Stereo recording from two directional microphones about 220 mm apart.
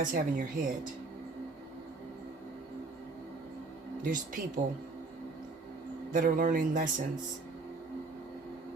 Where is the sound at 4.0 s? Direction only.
35° right (ahead or behind).